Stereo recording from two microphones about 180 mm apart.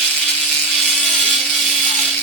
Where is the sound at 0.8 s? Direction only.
Centre (ahead or behind).